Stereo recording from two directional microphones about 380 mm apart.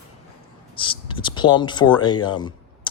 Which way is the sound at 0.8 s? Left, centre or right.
Centre.